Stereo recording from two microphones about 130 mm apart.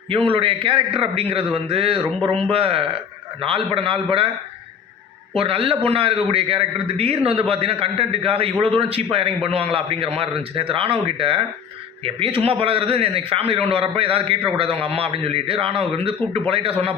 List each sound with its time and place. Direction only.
0.1 s a man's voice: 45° right (ahead or behind)
5.3 s a man's voice: 45° right (ahead or behind)